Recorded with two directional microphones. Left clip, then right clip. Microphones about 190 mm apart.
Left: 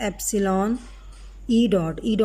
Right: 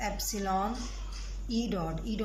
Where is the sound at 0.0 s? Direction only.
55° left (ahead or behind).